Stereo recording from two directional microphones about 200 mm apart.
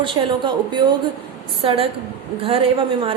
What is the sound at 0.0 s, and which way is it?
A woman's voice, 25° right (ahead or behind).